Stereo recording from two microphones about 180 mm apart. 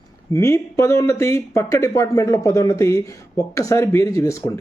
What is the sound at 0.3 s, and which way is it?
Speech, 15° left (ahead or behind).